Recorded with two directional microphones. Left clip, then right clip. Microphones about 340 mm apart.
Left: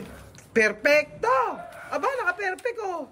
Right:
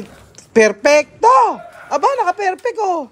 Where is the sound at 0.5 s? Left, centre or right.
Centre.